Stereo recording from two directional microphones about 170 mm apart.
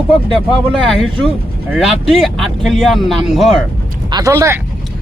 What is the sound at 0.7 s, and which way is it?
Speech, centre (ahead or behind).